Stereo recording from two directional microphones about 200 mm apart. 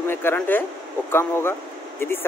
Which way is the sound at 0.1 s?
10° left (ahead or behind).